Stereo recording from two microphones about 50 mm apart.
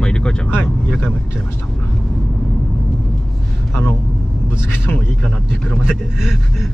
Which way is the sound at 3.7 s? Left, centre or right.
Left.